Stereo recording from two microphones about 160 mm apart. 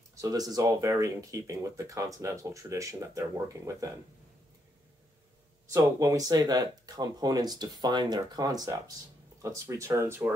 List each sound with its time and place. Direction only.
0.1 s speech: 20° right (ahead or behind)
5.7 s speech: 20° right (ahead or behind)